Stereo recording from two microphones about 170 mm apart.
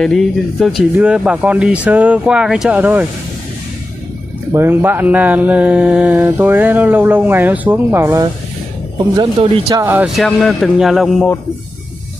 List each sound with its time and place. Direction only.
0.0 s speech: centre (ahead or behind)
4.5 s speech: 15° right (ahead or behind)
10.0 s speech: centre (ahead or behind)